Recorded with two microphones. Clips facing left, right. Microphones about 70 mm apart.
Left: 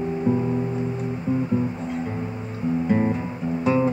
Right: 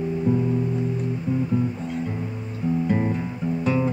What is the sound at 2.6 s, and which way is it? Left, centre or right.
Guitar, centre.